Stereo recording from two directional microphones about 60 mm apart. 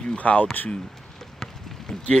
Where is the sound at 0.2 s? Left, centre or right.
Left.